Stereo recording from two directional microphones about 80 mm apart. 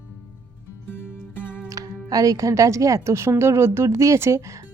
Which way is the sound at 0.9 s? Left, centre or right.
Left.